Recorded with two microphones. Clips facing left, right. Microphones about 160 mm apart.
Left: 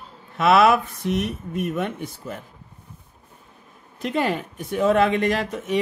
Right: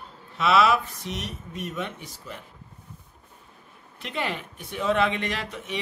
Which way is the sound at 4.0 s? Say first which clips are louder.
Left 8 dB; 45° left (ahead or behind).